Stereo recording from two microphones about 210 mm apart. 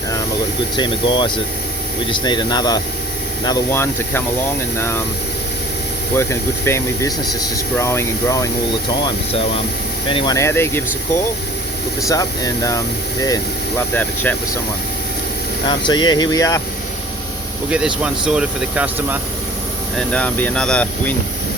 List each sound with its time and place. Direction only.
0.8 s speech: 20° left (ahead or behind)
6.1 s speech: 10° left (ahead or behind)
10.1 s speech: 20° left (ahead or behind)
12.0 s speech: 15° left (ahead or behind)
13.9 s speech: 10° left (ahead or behind)
15.6 s speech: 20° left (ahead or behind)
17.7 s speech: 5° right (ahead or behind)
20.0 s speech: 5° left (ahead or behind)